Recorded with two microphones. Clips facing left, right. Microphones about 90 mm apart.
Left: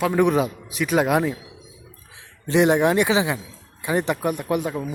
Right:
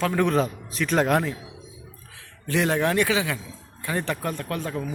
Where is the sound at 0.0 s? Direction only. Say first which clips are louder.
Left 3 dB; 15° left (ahead or behind).